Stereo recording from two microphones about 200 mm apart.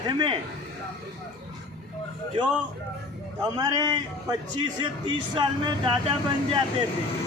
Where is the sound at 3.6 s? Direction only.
20° right (ahead or behind).